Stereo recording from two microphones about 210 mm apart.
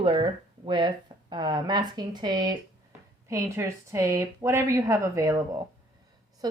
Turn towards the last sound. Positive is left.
turn(degrees=-20)  # may be behind; listen again after turning